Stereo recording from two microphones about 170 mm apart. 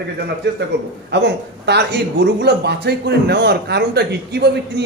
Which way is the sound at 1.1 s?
80° right.